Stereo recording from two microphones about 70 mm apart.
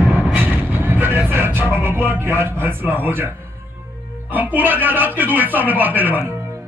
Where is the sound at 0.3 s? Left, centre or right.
Right.